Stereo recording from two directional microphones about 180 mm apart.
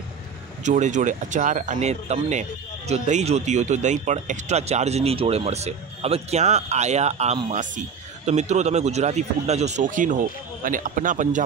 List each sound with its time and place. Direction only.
0.7 s speech: 40° right (ahead or behind)